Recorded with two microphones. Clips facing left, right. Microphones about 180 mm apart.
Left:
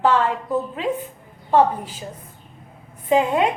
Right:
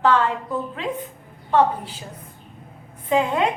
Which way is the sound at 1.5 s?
10° left (ahead or behind).